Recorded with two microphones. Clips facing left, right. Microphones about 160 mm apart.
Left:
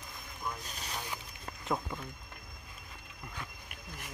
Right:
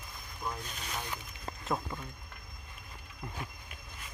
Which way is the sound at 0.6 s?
40° left (ahead or behind).